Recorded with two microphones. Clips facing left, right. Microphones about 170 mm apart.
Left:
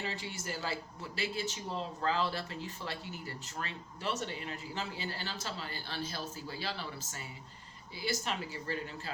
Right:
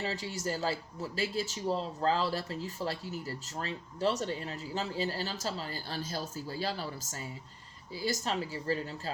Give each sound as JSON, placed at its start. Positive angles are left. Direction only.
{"t": 0.0, "sound": "speech", "side_deg": -40}